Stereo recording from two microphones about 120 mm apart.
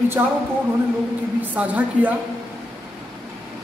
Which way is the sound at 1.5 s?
15° right (ahead or behind).